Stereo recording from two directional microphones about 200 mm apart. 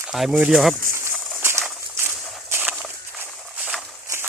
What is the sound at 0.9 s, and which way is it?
Bird, 10° right (ahead or behind).